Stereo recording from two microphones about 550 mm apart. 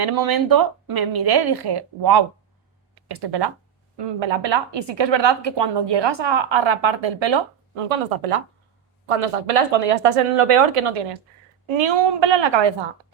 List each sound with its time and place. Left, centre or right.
0.0 s a woman's voice: right
7.9 s speech: right
9.0 s speech: right
11.8 s a woman's voice: right